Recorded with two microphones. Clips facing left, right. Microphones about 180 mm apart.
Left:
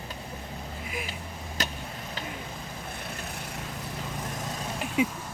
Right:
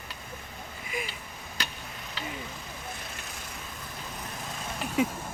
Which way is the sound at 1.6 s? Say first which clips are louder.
Left 5 dB; 45° left (ahead or behind).